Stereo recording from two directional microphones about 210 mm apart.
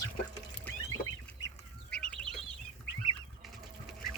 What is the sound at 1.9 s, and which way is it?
Chicken, 5° left (ahead or behind).